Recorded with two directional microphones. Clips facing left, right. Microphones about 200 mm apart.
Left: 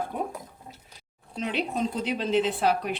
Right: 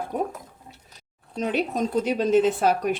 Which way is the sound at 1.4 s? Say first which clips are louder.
Right 3 dB; 45° right (ahead or behind).